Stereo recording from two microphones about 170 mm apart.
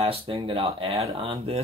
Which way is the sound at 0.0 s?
35° right (ahead or behind).